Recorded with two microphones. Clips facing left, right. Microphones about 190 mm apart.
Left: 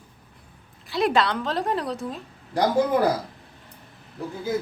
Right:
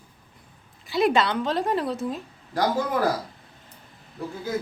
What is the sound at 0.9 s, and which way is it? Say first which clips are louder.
A woman's voice: right 1 dB; centre (ahead or behind).